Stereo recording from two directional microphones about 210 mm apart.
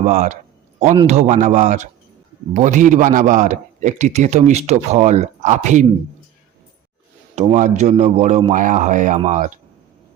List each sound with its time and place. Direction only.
0.0 s a man's voice: 35° right (ahead or behind)
7.3 s a man's voice: 35° right (ahead or behind)